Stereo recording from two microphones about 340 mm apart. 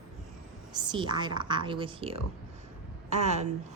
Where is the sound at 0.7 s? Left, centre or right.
Centre.